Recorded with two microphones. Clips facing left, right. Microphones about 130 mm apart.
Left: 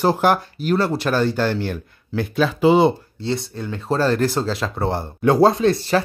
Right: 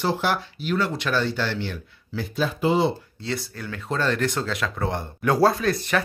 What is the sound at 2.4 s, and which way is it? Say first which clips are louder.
Speech: left 7 dB; 90° left.